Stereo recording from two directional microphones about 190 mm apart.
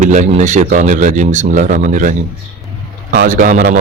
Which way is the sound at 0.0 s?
40° right (ahead or behind).